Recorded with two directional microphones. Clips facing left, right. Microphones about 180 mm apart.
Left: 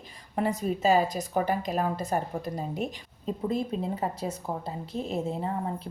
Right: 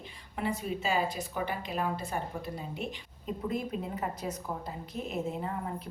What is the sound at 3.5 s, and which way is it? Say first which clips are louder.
A woman's voice: left 5 dB; 30° left (ahead or behind).